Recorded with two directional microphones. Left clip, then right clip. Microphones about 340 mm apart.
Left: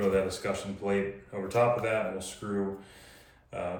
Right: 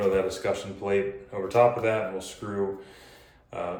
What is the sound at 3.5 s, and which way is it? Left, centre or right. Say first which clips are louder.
Speech: right 2 dB; centre.